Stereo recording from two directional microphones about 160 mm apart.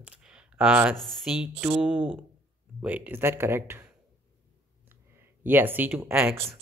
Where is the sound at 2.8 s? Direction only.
10° right (ahead or behind).